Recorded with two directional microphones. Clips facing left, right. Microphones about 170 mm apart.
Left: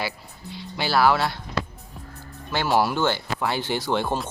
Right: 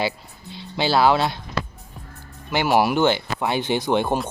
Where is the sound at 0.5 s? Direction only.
20° right (ahead or behind).